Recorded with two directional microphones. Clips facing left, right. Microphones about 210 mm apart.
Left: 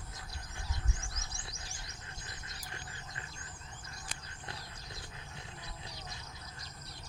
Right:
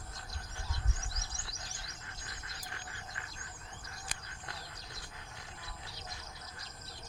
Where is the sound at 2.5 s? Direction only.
25° left (ahead or behind).